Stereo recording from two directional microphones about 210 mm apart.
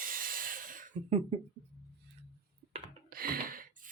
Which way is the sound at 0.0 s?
40° right (ahead or behind).